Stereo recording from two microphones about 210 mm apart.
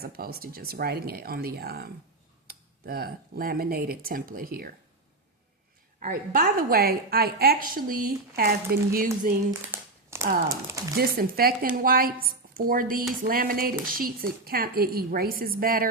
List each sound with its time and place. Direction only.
0.0 s a woman's voice: 45° right (ahead or behind)
6.0 s a woman's voice: 40° right (ahead or behind)
9.5 s crumpling: 10° right (ahead or behind)
10.5 s speech: 15° right (ahead or behind)
11.2 s a woman's voice: 45° right (ahead or behind)